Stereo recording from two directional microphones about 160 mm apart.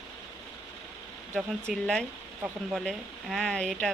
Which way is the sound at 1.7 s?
Centre (ahead or behind).